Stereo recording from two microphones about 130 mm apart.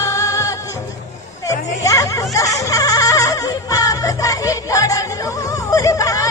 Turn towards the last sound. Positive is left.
turn(degrees=25)  # may be behind; listen again after turning